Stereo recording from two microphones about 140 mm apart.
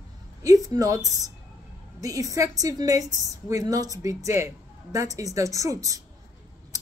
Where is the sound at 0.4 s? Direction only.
25° right (ahead or behind).